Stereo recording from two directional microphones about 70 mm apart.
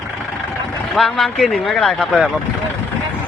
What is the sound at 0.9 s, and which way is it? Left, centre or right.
Speech, centre.